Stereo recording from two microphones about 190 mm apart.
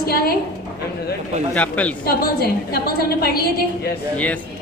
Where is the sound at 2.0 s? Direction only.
55° left (ahead or behind).